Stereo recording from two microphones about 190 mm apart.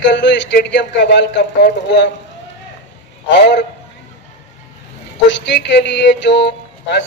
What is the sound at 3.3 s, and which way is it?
Speech, 65° left (ahead or behind).